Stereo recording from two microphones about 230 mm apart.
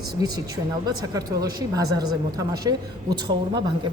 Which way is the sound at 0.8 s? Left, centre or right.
Centre.